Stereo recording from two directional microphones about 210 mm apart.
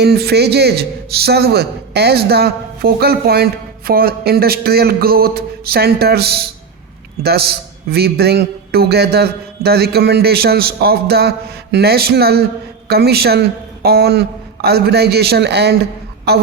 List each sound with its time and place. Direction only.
0.0 s a man's voice: 50° right (ahead or behind)